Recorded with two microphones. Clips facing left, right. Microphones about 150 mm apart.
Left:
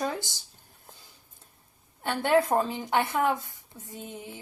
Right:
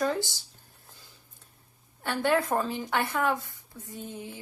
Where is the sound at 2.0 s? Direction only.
20° left (ahead or behind).